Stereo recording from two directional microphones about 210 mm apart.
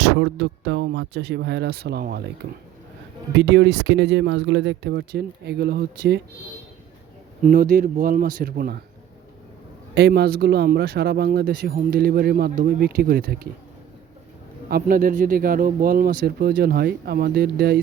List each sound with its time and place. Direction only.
0.0 s speech: 50° right (ahead or behind)
3.3 s speech: 55° right (ahead or behind)
7.4 s speech: 40° right (ahead or behind)
9.9 s speech: 50° right (ahead or behind)
14.7 s speech: 45° right (ahead or behind)